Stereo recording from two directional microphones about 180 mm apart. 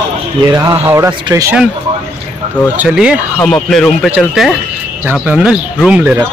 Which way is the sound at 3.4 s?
5° left (ahead or behind).